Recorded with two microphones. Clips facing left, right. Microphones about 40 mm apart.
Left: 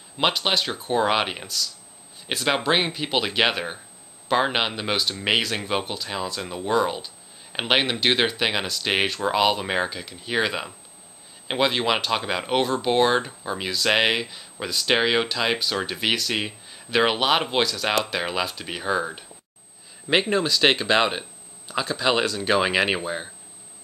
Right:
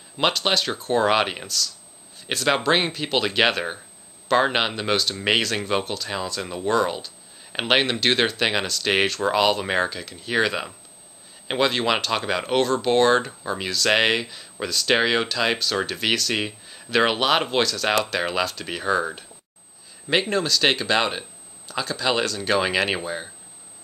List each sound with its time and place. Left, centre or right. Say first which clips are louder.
0.2 s speech: right 1 dB; centre
20.1 s speech: left 1 dB; centre